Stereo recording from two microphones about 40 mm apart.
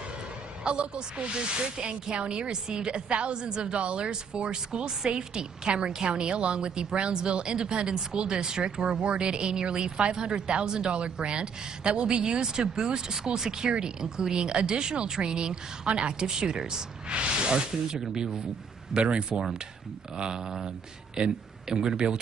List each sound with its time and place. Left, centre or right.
0.7 s speech: right
17.1 s speech: right
21.2 s speech: right